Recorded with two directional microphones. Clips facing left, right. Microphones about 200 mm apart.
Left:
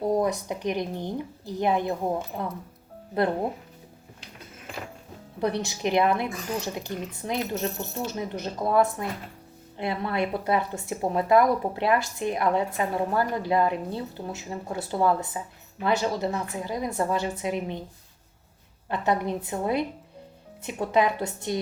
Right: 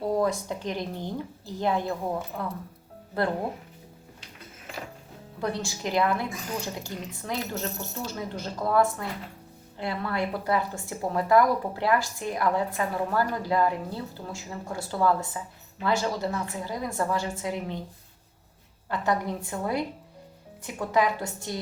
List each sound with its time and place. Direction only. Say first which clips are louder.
0.1 s speech: right 1 dB; 20° left (ahead or behind)
5.4 s speech: left 4 dB; 20° left (ahead or behind)
18.9 s speech: left 2 dB; 20° left (ahead or behind)